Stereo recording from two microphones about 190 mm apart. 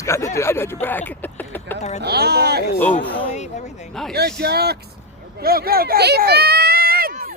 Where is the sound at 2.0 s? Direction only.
60° right (ahead or behind).